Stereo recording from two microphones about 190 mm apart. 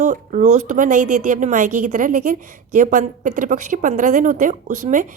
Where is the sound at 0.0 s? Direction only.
40° right (ahead or behind).